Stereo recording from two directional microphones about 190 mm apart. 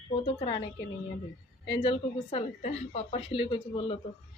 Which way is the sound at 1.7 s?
25° left (ahead or behind).